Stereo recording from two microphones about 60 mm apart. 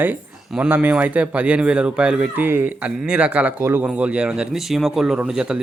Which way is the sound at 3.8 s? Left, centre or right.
Right.